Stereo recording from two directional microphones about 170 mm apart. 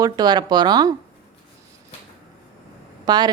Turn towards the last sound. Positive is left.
turn(degrees=-25)  # may be behind; listen again after turning